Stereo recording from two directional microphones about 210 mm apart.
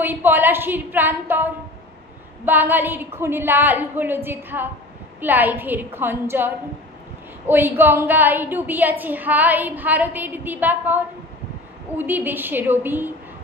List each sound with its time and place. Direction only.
0.0 s a woman's voice: 10° right (ahead or behind)